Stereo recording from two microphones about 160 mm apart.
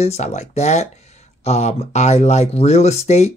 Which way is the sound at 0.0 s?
45° left (ahead or behind).